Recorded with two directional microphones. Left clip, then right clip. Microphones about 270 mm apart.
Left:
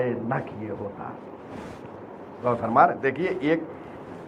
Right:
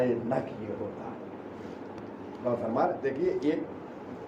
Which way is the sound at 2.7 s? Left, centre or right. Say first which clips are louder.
Left 12 dB; left.